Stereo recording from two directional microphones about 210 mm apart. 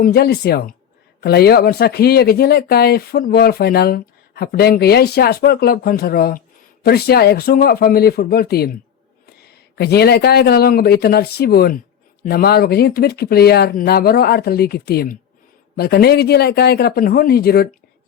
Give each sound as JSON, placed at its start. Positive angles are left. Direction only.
{"t": 0.0, "sound": "speech", "side_deg": 50}
{"t": 9.7, "sound": "speech", "side_deg": 50}